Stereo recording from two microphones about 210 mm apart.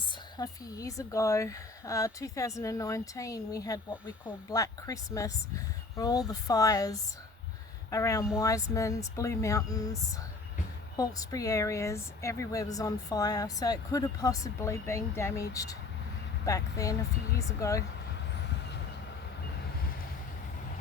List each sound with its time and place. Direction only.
0.3 s a woman's voice: 15° left (ahead or behind)